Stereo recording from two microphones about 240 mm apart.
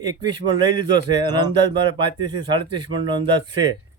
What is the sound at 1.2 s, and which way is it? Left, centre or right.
Speech, centre.